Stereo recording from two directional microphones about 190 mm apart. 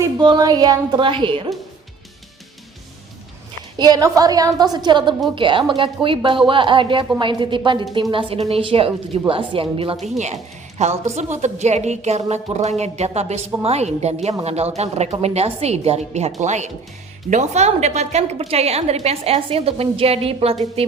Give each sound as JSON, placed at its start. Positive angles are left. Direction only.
{"t": 0.0, "sound": "a woman's voice", "side_deg": -20}
{"t": 3.8, "sound": "a woman's voice", "side_deg": -20}